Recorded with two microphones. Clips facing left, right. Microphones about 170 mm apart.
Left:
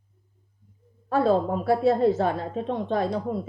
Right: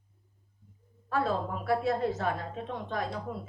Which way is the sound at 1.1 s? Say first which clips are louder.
Left 9 dB; 30° left (ahead or behind).